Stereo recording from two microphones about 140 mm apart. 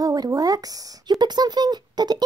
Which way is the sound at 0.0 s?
25° right (ahead or behind).